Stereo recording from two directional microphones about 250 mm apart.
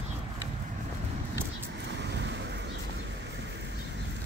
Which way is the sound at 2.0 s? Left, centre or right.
Right.